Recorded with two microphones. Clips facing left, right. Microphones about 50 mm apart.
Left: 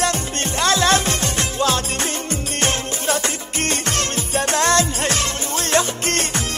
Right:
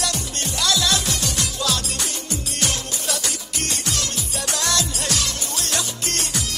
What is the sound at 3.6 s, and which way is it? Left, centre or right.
Music, left.